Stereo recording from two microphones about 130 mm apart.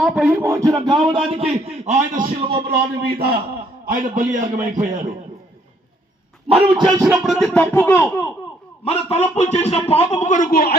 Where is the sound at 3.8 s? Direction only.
85° right.